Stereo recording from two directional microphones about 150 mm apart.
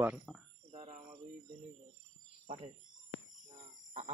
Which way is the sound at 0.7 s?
55° right (ahead or behind).